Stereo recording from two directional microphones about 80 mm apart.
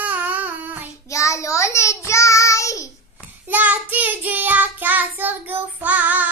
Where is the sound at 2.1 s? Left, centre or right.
Left.